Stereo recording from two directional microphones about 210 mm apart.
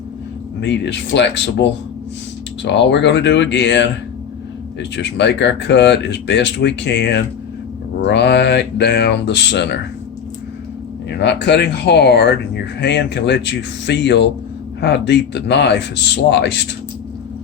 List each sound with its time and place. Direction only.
0.6 s speech: 55° left (ahead or behind)
2.6 s speech: 55° left (ahead or behind)
11.2 s speech: 55° left (ahead or behind)